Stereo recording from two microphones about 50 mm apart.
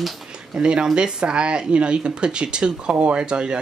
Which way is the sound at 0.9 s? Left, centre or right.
Centre.